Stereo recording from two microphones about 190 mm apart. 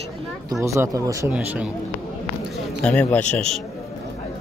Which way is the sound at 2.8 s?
5° left (ahead or behind).